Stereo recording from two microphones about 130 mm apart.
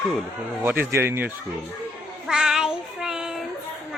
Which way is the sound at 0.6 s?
15° right (ahead or behind).